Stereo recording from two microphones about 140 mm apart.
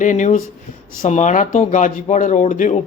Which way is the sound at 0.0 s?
60° left (ahead or behind).